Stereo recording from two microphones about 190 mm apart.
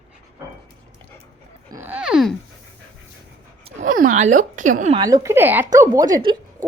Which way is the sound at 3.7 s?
40° right (ahead or behind).